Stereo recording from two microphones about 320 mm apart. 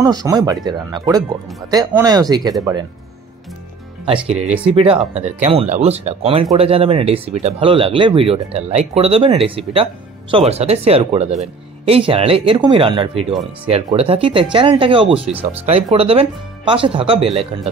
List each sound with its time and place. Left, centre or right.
0.0 s speech: centre
4.4 s speech: centre